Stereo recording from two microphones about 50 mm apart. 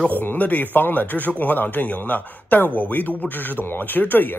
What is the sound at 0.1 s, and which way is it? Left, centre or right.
Speech, left.